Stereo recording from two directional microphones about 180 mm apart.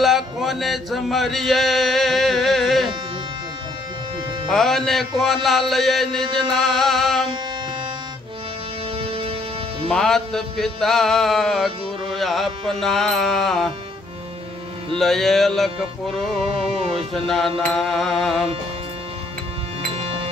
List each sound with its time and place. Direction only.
0.0 s music: centre (ahead or behind)
4.5 s music: centre (ahead or behind)
6.5 s chant: centre (ahead or behind)
8.9 s music: 30° right (ahead or behind)
9.8 s music: 5° left (ahead or behind)
15.0 s music: centre (ahead or behind)
17.6 s music: centre (ahead or behind)
19.9 s music: 30° right (ahead or behind)